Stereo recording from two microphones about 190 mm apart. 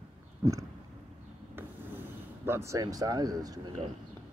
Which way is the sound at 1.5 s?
10° right (ahead or behind).